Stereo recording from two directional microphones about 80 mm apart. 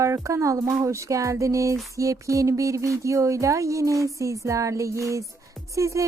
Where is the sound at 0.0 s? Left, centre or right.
Right.